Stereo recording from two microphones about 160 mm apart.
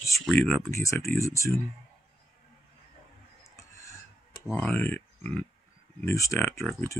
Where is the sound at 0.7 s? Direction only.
20° left (ahead or behind).